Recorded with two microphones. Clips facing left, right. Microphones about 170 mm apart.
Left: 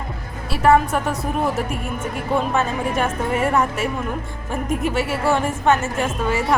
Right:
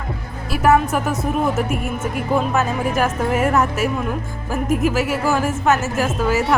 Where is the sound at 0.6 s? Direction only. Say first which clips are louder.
Even; 5° right (ahead or behind).